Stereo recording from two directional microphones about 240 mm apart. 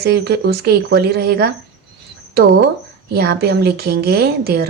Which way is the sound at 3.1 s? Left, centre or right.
Right.